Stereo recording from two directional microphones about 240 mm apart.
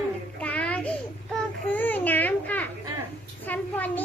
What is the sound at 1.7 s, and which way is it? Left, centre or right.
A child's voice, centre.